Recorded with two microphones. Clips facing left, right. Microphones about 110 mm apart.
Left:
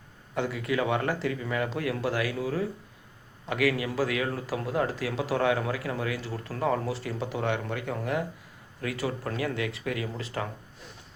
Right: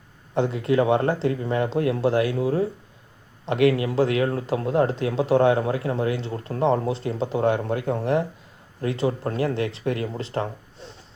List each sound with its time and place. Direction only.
0.3 s a man's voice: 30° right (ahead or behind)